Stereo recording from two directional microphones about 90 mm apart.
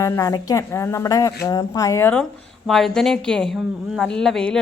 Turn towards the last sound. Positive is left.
turn(degrees=5)  # may be behind; listen again after turning